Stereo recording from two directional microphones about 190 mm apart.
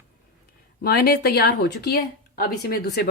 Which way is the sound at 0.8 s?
55° left (ahead or behind).